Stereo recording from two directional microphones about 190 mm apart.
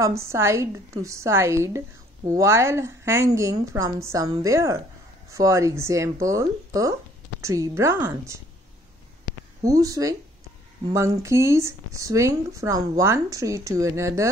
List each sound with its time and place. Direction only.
0.0 s speech: 15° right (ahead or behind)
9.6 s speech: 20° right (ahead or behind)